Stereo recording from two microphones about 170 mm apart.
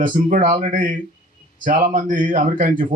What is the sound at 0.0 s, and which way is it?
Speech, 55° right (ahead or behind).